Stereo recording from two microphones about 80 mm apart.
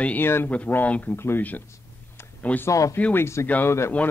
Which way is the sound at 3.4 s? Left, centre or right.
Left.